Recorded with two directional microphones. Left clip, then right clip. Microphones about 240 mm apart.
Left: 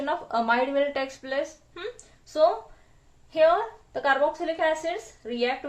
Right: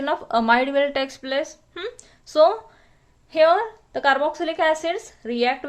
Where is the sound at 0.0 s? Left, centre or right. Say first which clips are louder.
Right 5 dB; right.